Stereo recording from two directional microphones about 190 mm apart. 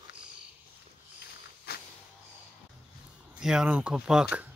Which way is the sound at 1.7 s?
55° left (ahead or behind).